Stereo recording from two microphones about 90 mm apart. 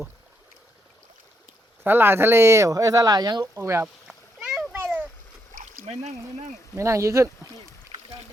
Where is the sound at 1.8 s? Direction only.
25° right (ahead or behind); by 3.5 s 50° right (ahead or behind).